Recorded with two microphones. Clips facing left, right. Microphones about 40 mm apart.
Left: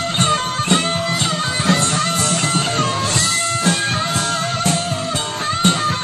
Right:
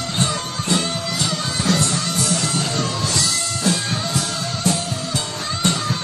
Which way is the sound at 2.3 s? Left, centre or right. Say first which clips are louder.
Left 3 dB; left.